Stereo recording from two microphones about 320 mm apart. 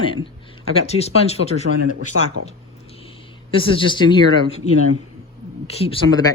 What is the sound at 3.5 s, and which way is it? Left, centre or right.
Speech, centre.